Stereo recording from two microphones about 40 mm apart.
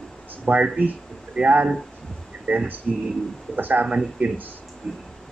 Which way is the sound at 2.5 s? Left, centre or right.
Right.